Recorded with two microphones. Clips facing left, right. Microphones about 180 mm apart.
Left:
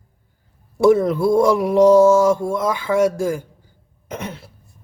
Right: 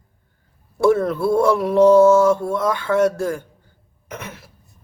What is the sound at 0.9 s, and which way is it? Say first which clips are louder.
Speech: left 2 dB; 15° left (ahead or behind).